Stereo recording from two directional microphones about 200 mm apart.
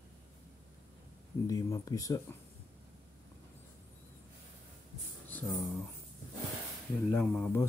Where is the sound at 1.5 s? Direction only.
15° left (ahead or behind).